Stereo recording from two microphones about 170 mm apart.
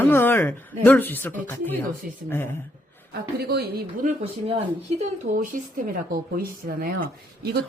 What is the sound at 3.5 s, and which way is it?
Speech, 65° right (ahead or behind).